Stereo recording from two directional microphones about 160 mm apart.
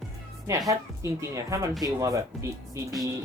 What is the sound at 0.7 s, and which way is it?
Speech, 20° right (ahead or behind).